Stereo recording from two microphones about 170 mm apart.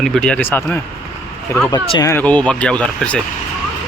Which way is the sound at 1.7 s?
25° left (ahead or behind).